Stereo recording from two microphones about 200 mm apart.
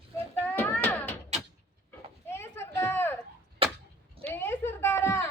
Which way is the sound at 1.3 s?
35° right (ahead or behind).